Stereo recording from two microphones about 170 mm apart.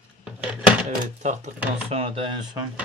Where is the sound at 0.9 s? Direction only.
45° right (ahead or behind).